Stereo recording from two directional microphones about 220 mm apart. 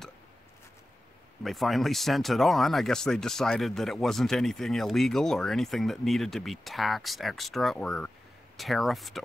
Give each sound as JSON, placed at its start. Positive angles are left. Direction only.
{"t": 1.4, "sound": "speech", "side_deg": 0}